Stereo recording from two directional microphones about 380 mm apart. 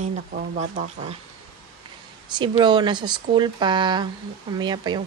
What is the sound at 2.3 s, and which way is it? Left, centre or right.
Speech, centre.